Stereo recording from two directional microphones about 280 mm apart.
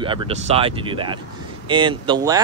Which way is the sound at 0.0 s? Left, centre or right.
Centre.